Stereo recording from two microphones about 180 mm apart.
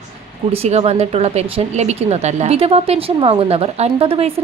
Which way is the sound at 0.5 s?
35° right (ahead or behind).